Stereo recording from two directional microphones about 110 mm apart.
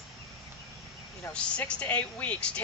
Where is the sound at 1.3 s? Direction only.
10° left (ahead or behind).